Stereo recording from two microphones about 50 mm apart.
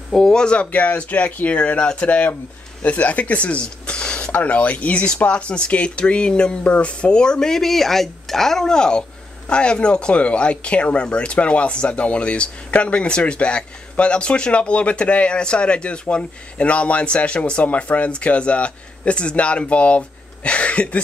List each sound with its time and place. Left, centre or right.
0.1 s speech: centre
0.7 s speech: left